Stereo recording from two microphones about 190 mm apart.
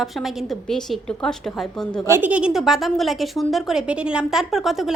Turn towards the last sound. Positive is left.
turn(degrees=0)  # may be behind; listen again after turning